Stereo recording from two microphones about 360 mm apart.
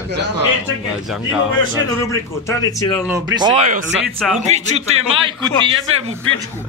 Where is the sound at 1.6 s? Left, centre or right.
Centre.